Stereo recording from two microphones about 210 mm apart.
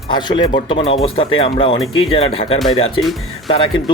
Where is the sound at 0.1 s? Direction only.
20° left (ahead or behind).